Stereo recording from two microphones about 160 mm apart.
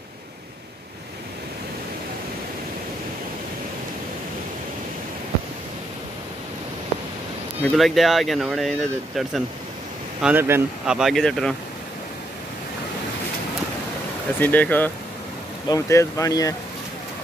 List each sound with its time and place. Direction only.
7.6 s speech: centre (ahead or behind)
10.2 s speech: 15° right (ahead or behind)
10.9 s speech: centre (ahead or behind)
14.4 s speech: 10° left (ahead or behind)